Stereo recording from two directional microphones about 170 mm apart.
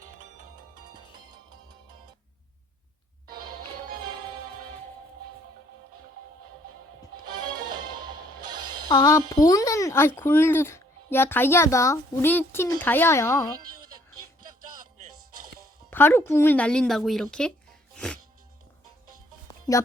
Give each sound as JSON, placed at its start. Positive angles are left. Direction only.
{"t": 3.2, "sound": "music", "side_deg": -25}
{"t": 7.3, "sound": "music", "side_deg": -25}
{"t": 8.9, "sound": "music", "side_deg": 20}
{"t": 9.3, "sound": "speech", "side_deg": 20}
{"t": 14.7, "sound": "music", "side_deg": -50}
{"t": 15.9, "sound": "speech", "side_deg": 10}
{"t": 17.9, "sound": "music", "side_deg": 5}